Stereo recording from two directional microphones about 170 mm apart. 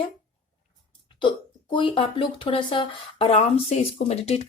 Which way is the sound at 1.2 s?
30° left (ahead or behind).